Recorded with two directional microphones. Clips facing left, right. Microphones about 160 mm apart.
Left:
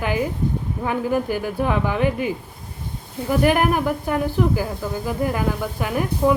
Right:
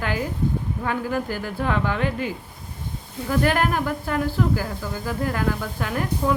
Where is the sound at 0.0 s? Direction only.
15° left (ahead or behind).